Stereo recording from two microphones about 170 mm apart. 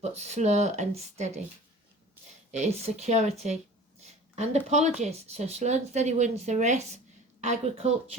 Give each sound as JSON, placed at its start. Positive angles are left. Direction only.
{"t": 0.0, "sound": "speech", "side_deg": -40}
{"t": 2.5, "sound": "speech", "side_deg": -40}